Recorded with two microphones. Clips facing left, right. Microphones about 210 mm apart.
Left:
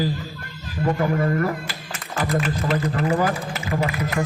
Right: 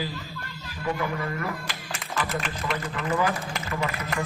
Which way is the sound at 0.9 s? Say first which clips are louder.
Left 7 dB; 45° left (ahead or behind).